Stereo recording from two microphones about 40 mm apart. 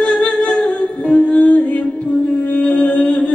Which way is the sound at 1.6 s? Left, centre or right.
Left.